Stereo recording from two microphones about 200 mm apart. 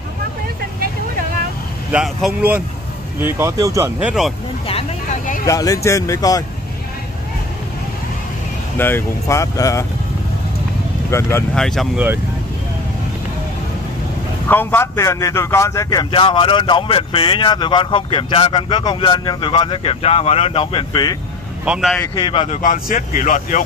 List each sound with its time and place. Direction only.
1.9 s speech: 5° right (ahead or behind)
5.5 s speech: 15° left (ahead or behind)
8.7 s speech: 10° left (ahead or behind)
11.1 s speech: 15° left (ahead or behind)
14.5 s speech: 10° left (ahead or behind)
21.7 s speech: 5° right (ahead or behind)
22.1 s speech: 25° left (ahead or behind)
22.6 s speech: 40° left (ahead or behind)